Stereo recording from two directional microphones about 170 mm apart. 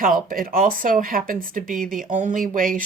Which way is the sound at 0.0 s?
55° right (ahead or behind).